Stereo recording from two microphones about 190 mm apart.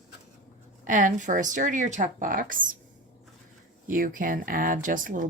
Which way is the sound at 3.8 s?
45° right (ahead or behind).